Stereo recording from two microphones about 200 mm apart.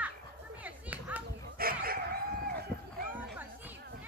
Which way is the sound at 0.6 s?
5° right (ahead or behind).